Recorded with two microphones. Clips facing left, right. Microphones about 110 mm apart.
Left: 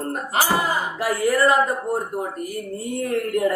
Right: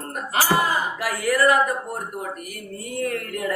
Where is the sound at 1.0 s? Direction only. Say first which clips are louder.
Left 3 dB; 25° left (ahead or behind).